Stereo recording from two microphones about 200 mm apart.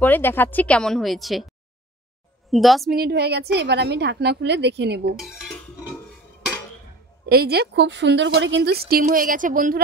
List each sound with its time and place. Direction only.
0.0 s a woman's voice: 10° left (ahead or behind)
2.5 s a woman's voice: centre (ahead or behind)
2.9 s a woman's voice: 50° right (ahead or behind)
5.2 s dishes: centre (ahead or behind)
7.2 s speech: 50° right (ahead or behind)